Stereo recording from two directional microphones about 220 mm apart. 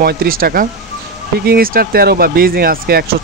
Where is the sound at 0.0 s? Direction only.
45° right (ahead or behind).